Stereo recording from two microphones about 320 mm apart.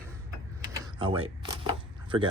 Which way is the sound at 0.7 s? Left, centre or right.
Centre.